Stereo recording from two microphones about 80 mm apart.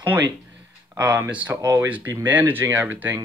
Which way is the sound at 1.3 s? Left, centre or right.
Centre.